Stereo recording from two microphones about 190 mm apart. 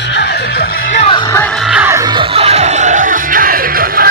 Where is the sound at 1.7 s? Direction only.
10° right (ahead or behind).